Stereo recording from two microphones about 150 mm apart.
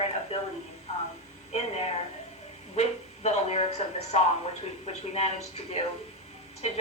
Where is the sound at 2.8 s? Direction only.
45° left (ahead or behind).